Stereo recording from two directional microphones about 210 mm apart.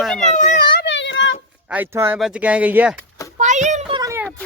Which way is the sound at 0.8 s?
60° left (ahead or behind).